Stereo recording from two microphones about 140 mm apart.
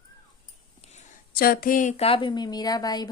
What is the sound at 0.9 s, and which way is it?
Speech, 90° left.